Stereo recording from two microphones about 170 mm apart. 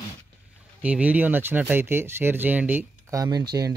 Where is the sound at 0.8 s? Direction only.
10° right (ahead or behind).